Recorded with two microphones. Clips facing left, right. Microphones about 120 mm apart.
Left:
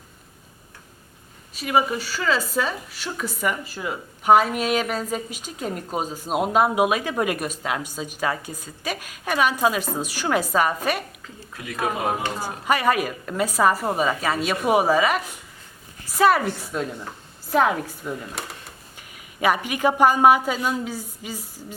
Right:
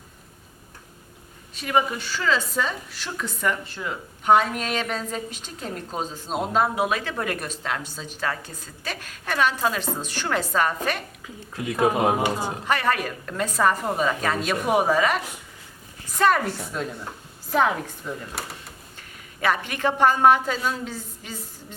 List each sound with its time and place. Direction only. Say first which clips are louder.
1.5 s a woman's voice: left 2 dB; 5° left (ahead or behind)
11.5 s speech: right 5 dB; 25° right (ahead or behind)
12.6 s a woman's voice: left 4 dB; 10° left (ahead or behind)